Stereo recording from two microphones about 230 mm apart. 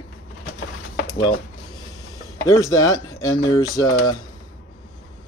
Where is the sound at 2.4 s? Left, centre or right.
Centre.